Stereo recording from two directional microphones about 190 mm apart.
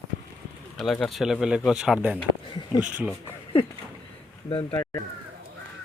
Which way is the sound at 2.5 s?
20° left (ahead or behind).